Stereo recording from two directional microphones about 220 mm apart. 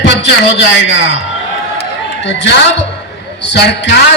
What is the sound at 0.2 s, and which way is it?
Speech, 55° left (ahead or behind).